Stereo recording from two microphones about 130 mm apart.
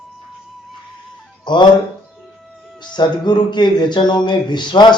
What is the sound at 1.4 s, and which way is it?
Speech, 35° left (ahead or behind).